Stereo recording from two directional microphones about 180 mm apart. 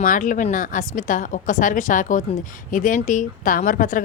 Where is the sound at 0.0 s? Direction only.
45° left (ahead or behind).